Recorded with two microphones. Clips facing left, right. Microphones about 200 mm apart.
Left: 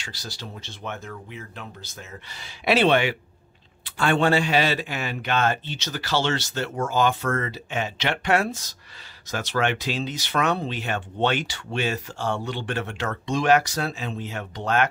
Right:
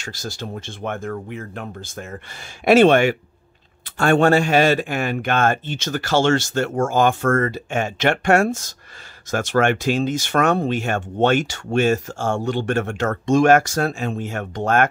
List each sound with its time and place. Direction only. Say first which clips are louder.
0.0 s speech: right 7 dB; 45° right (ahead or behind)